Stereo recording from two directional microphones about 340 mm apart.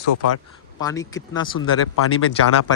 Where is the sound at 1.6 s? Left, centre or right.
Left.